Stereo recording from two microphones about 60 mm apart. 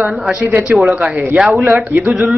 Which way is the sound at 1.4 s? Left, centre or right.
Centre.